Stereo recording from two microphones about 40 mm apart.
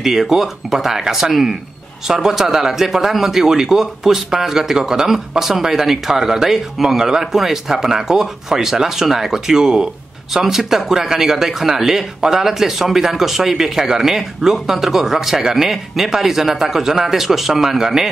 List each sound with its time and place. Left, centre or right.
0.0 s speech: centre